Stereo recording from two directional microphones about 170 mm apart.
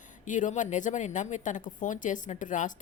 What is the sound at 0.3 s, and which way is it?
Speech, 50° left (ahead or behind).